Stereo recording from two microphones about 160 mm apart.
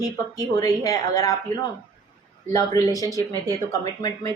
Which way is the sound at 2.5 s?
20° left (ahead or behind).